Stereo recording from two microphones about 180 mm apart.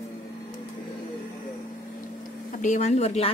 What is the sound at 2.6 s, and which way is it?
Speech, 40° left (ahead or behind).